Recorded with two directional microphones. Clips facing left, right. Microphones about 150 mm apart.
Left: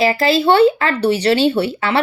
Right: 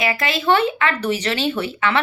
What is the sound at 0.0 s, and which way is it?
Speech, 35° left (ahead or behind).